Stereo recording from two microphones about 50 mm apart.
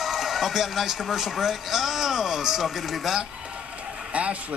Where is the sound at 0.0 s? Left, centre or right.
Centre.